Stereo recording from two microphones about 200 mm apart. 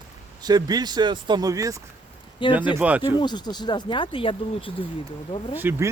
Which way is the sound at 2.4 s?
25° left (ahead or behind).